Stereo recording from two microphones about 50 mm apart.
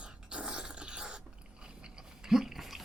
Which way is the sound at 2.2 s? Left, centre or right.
Centre.